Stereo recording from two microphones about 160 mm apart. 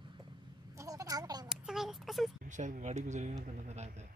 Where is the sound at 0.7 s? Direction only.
20° right (ahead or behind).